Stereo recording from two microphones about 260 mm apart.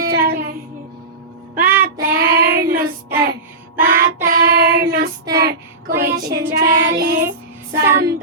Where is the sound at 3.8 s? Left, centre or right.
Right.